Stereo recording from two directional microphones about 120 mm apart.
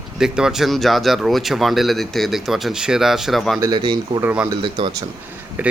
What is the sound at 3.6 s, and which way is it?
Speech, 40° right (ahead or behind).